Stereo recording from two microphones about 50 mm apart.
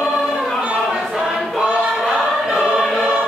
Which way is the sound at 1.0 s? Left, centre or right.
Centre.